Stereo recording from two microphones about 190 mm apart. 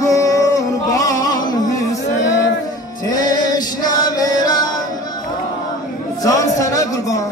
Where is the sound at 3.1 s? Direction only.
20° left (ahead or behind).